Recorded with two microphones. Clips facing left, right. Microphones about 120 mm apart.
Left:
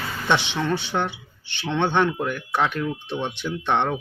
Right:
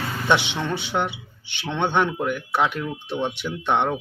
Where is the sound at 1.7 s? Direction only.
15° right (ahead or behind).